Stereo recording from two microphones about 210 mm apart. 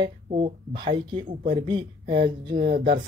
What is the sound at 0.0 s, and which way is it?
Speech, 25° right (ahead or behind).